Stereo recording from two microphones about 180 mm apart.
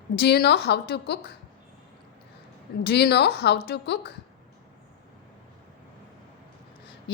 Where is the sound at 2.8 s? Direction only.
65° left (ahead or behind).